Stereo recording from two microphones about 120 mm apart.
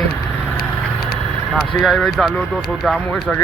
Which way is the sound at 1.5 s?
Centre (ahead or behind).